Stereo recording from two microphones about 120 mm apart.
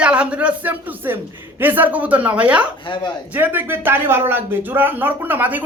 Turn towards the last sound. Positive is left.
turn(degrees=-15)  # may be behind; listen again after turning